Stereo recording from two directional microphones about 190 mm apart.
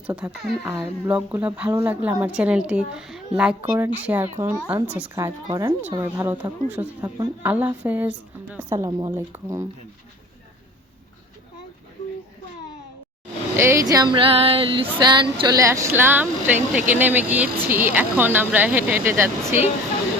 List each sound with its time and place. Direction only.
0.1 s female singing: 10° right (ahead or behind)
13.6 s female singing: 15° right (ahead or behind)